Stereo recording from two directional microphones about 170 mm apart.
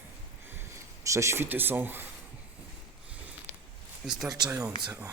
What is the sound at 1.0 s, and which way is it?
Speech, 15° right (ahead or behind).